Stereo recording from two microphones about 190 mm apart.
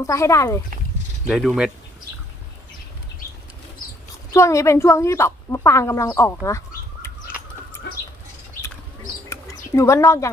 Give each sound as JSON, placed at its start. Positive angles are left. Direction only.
{"t": 0.0, "sound": "speech", "side_deg": 15}
{"t": 1.2, "sound": "speech", "side_deg": 0}
{"t": 4.3, "sound": "speech", "side_deg": 15}
{"t": 9.3, "sound": "a sound", "side_deg": 15}